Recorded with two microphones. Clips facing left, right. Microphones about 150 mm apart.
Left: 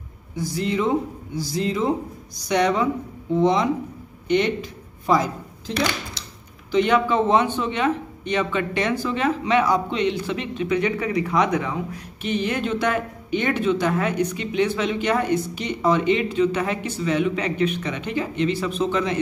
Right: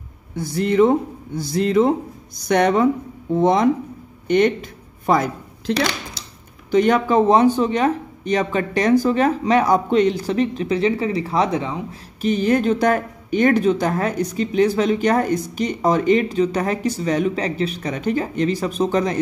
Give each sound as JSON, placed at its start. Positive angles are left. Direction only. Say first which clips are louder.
{"t": 0.4, "sound": "speech", "louder": "right 7 dB", "side_deg": -55}
{"t": 6.7, "sound": "speech", "louder": "right 3 dB", "side_deg": -45}
{"t": 12.2, "sound": "speech", "louder": "right 6 dB", "side_deg": -40}